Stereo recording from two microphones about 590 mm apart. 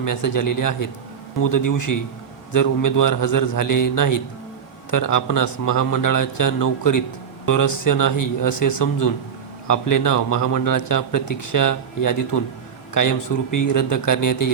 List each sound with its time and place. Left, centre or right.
0.0 s speech: left